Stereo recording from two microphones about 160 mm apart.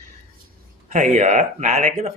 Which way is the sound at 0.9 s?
50° right (ahead or behind).